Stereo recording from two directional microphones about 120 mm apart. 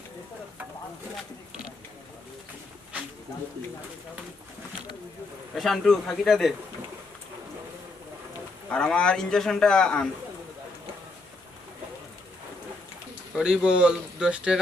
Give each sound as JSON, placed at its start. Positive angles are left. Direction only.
{"t": 1.1, "sound": "a sound", "side_deg": -5}
{"t": 5.5, "sound": "a man's voice", "side_deg": 0}
{"t": 8.7, "sound": "a man's voice", "side_deg": 5}
{"t": 13.3, "sound": "speech", "side_deg": -5}